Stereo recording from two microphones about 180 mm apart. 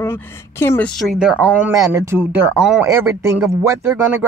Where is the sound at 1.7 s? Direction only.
15° right (ahead or behind).